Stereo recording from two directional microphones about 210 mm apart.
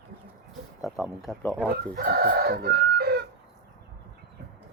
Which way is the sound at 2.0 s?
45° right (ahead or behind).